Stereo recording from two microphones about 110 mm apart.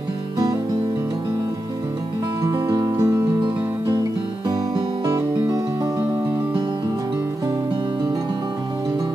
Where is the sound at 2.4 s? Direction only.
35° right (ahead or behind).